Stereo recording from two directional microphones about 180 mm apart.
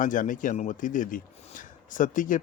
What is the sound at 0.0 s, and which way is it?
Speech, 45° left (ahead or behind).